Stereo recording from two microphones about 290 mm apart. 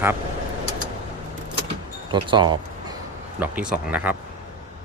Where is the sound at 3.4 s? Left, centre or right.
Centre.